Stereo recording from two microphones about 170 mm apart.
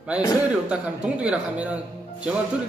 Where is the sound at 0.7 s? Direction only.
5° right (ahead or behind).